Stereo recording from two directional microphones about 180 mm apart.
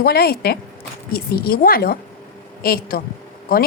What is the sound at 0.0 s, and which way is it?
A woman's voice, 60° left (ahead or behind).